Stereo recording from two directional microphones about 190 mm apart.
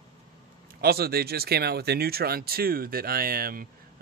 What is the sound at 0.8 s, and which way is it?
Speech, 55° right (ahead or behind).